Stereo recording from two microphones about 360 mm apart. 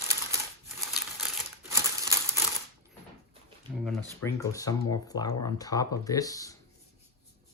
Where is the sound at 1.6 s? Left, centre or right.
Centre.